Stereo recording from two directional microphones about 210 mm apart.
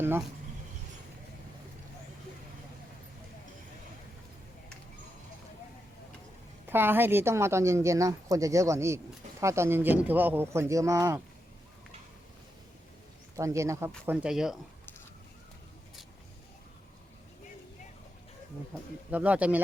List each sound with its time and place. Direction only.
6.7 s speech: 10° right (ahead or behind)
13.3 s speech: 15° right (ahead or behind)
19.1 s speech: 5° right (ahead or behind)